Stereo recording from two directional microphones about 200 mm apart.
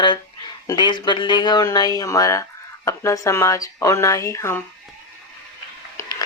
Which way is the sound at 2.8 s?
15° left (ahead or behind).